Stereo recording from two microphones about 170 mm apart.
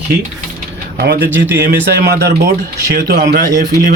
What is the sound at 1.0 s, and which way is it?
Speech, 75° right (ahead or behind).